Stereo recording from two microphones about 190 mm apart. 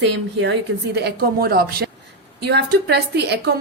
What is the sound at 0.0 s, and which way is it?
Speech, 65° right (ahead or behind).